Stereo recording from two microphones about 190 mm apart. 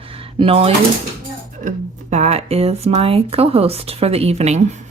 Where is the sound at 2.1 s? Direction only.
35° right (ahead or behind).